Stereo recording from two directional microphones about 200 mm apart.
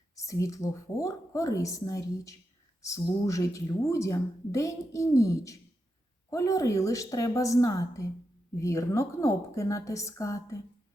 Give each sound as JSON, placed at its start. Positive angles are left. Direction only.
{"t": 0.2, "sound": "a woman's voice", "side_deg": 15}